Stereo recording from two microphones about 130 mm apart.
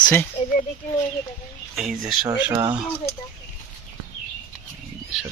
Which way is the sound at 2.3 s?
20° right (ahead or behind).